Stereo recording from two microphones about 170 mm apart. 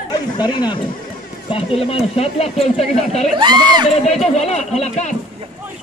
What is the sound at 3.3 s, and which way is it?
Speech, 25° right (ahead or behind).